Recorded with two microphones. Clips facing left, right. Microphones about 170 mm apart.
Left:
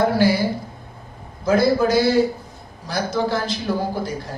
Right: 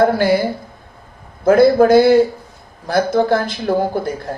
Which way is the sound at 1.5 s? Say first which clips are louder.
Right 7 dB; 55° right (ahead or behind).